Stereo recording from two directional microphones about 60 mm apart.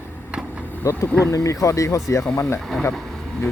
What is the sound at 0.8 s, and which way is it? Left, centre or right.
Speech, left.